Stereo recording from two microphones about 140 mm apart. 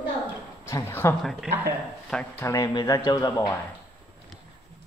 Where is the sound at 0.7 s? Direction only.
20° left (ahead or behind).